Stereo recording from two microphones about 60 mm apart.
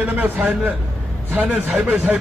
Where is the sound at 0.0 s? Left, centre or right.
Right.